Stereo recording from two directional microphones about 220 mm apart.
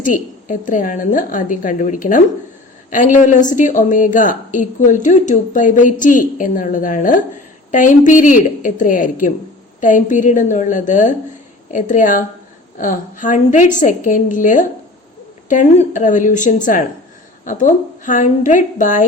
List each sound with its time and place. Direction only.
0.0 s a woman's voice: 35° left (ahead or behind)